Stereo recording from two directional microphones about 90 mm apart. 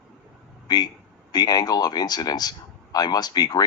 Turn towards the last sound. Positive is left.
turn(degrees=45)  # may be behind; listen again after turning